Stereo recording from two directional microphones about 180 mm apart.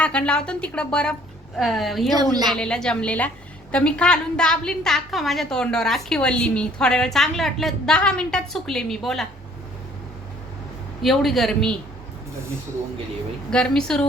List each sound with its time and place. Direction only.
0.0 s a woman's voice: 5° left (ahead or behind)
2.1 s a woman's voice: 20° right (ahead or behind)
2.5 s a woman's voice: 5° left (ahead or behind)
11.0 s a woman's voice: centre (ahead or behind)
13.5 s a woman's voice: 5° left (ahead or behind)